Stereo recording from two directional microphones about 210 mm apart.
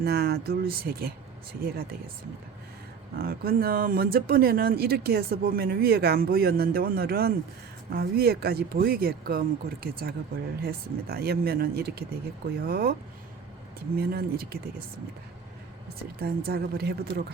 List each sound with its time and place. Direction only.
0.0 s speech: 50° right (ahead or behind)
3.2 s speech: 45° right (ahead or behind)
16.2 s speech: 45° right (ahead or behind)